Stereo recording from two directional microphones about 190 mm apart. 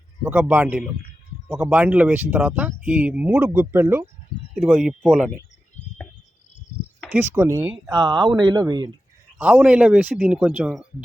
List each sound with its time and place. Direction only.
0.2 s speech: 10° right (ahead or behind)
7.1 s speech: 10° right (ahead or behind)
9.4 s speech: 5° right (ahead or behind)